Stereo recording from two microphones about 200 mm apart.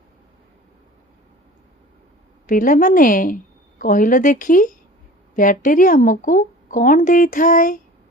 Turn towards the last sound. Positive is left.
turn(degrees=40)  # may be behind; listen again after turning